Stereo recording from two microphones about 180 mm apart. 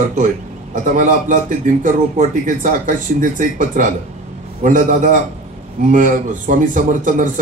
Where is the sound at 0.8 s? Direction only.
45° right (ahead or behind).